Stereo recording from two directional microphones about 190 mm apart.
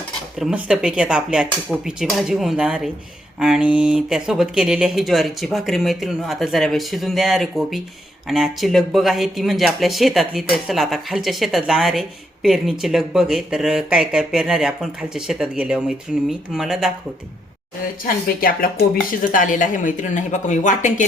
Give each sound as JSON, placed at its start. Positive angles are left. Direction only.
{"t": 0.3, "sound": "speech", "side_deg": -5}
{"t": 18.0, "sound": "speech", "side_deg": 50}